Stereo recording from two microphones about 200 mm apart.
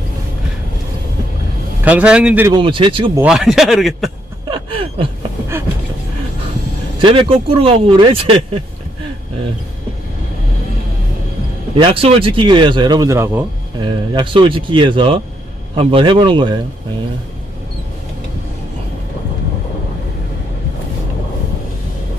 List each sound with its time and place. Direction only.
1.9 s a man's voice: 5° right (ahead or behind)
2.5 s a man's voice: 25° right (ahead or behind)
3.2 s a man's voice: 5° right (ahead or behind)
4.5 s gasp: 25° right (ahead or behind)
7.0 s a man's voice: 25° right (ahead or behind)
11.8 s a man's voice: 25° right (ahead or behind); by 13.5 s 10° right (ahead or behind)
13.7 s a man's voice: 20° right (ahead or behind)